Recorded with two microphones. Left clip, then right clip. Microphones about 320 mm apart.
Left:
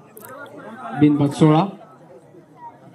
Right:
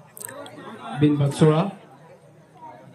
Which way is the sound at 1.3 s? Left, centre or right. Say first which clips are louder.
Left 3 dB; left.